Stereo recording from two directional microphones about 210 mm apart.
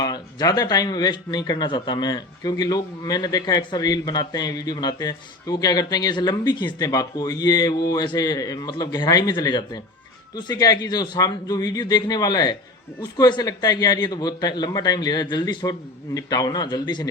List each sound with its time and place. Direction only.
0.0 s speech: 20° left (ahead or behind)